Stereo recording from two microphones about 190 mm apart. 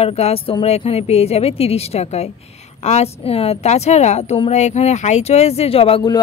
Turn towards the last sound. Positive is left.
turn(degrees=25)  # may be behind; listen again after turning